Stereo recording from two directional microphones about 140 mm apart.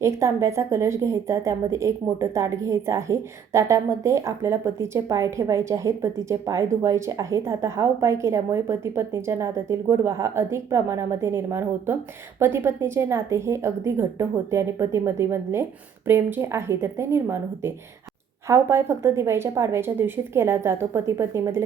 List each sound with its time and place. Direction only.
0.0 s a woman's voice: 20° right (ahead or behind)